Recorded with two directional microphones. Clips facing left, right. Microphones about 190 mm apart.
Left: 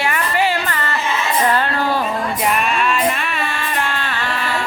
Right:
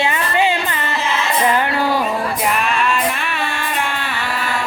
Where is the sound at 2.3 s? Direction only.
Centre (ahead or behind).